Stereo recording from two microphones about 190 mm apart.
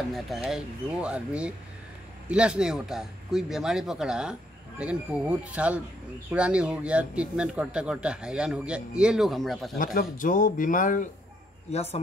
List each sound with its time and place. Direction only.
0.1 s speech: centre (ahead or behind)
9.9 s speech: 45° left (ahead or behind)
11.7 s speech: 35° left (ahead or behind)